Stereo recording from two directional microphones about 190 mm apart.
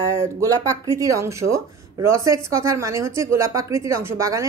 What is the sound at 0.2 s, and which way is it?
Speech, 15° right (ahead or behind).